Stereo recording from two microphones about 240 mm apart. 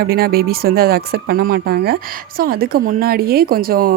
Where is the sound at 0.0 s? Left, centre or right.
Right.